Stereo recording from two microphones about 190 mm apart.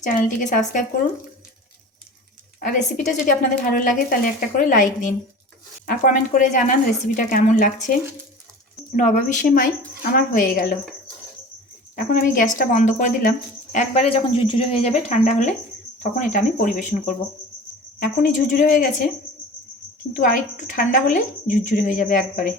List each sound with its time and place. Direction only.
0.3 s speech: 45° left (ahead or behind)
2.6 s speech: 45° left (ahead or behind)
9.0 s speech: 40° left (ahead or behind)
11.9 s speech: 45° left (ahead or behind)
13.7 s speech: 30° left (ahead or behind)
20.1 s speech: 45° left (ahead or behind)